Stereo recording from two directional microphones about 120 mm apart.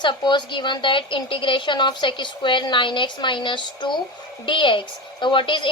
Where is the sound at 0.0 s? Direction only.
40° left (ahead or behind).